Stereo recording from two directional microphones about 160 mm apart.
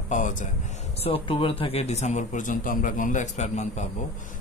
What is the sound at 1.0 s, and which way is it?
A man's voice, 35° left (ahead or behind).